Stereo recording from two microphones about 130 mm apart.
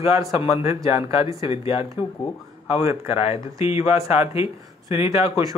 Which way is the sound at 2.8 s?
50° left (ahead or behind).